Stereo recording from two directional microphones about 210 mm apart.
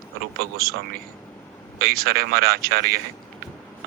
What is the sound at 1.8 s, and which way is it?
Speech, 45° right (ahead or behind).